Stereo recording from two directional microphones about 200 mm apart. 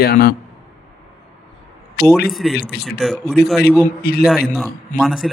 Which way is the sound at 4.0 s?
50° left (ahead or behind).